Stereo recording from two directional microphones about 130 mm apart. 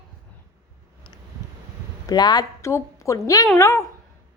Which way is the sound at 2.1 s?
30° left (ahead or behind).